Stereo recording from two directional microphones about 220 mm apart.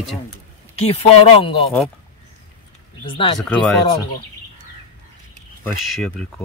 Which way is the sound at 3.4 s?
Centre (ahead or behind).